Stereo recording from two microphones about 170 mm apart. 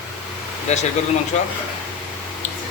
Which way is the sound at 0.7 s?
45° left (ahead or behind).